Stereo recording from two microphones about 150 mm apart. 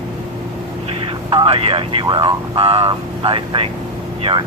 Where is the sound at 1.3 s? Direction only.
35° right (ahead or behind).